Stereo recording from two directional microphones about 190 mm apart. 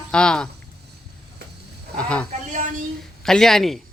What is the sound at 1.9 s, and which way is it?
Speech, 5° left (ahead or behind).